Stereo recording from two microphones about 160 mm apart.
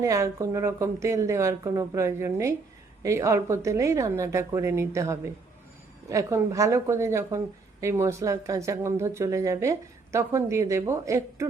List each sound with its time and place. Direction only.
0.0 s a woman's voice: 20° right (ahead or behind)